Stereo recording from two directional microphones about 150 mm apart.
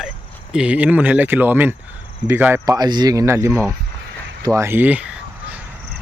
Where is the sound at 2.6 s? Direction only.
25° right (ahead or behind).